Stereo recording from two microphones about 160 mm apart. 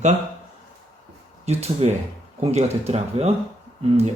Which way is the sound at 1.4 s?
40° right (ahead or behind).